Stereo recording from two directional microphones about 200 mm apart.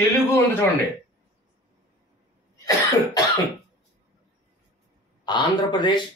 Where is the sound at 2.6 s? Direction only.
15° left (ahead or behind).